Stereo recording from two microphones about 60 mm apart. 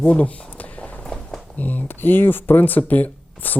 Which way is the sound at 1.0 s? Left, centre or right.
Centre.